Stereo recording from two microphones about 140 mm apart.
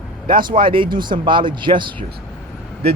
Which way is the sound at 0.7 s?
35° right (ahead or behind).